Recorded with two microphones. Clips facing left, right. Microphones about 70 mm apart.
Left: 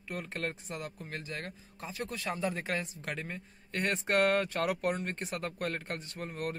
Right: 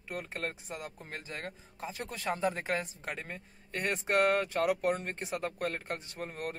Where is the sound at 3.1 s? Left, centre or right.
Centre.